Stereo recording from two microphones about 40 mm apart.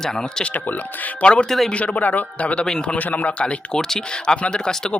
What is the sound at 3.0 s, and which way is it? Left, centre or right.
Speech, left.